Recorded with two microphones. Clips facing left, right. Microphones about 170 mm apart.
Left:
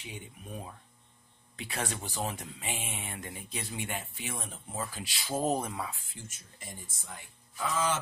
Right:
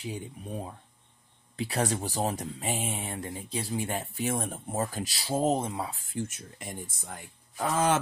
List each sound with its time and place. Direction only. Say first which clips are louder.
0.0 s speech: right 8 dB; 35° right (ahead or behind)
5.3 s speech: right 3 dB; 25° right (ahead or behind)
5.9 s speech: right 14 dB; 50° right (ahead or behind)